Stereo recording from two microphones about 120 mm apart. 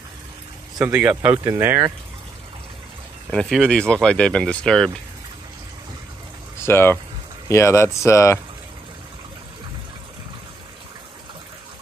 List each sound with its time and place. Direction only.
0.9 s speech: 10° right (ahead or behind)
3.3 s speech: 5° left (ahead or behind)
6.6 s speech: 20° left (ahead or behind)